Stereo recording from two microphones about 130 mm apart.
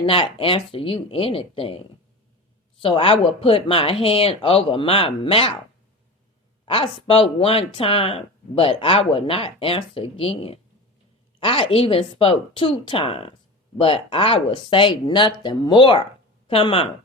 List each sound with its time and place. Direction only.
0.0 s speech: 45° left (ahead or behind)
6.7 s speech: 45° left (ahead or behind)